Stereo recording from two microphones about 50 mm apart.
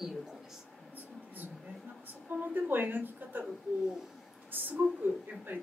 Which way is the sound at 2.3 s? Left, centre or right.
Right.